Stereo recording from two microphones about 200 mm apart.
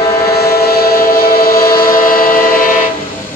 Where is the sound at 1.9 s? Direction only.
45° left (ahead or behind).